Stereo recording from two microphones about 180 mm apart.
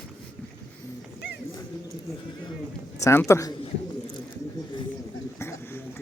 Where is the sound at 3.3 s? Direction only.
15° left (ahead or behind).